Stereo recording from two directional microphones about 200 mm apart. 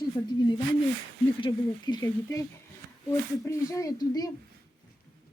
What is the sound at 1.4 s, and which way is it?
Speech, 20° left (ahead or behind).